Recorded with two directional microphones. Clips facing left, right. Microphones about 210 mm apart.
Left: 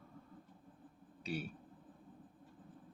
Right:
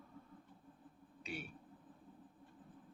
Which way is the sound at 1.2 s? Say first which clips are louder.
Left 5 dB; 40° left (ahead or behind).